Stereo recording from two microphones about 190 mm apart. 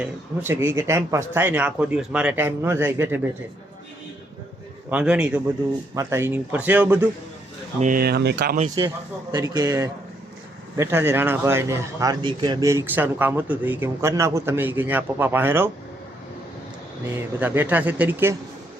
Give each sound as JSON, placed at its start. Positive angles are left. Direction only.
{"t": 0.0, "sound": "a man's voice", "side_deg": -10}
{"t": 4.9, "sound": "a man's voice", "side_deg": -5}
{"t": 7.8, "sound": "speech", "side_deg": -45}
{"t": 8.8, "sound": "a man's voice", "side_deg": -20}
{"t": 17.2, "sound": "a man's voice", "side_deg": -10}